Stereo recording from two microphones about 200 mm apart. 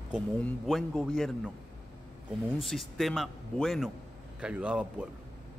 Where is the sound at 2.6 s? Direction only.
Centre (ahead or behind).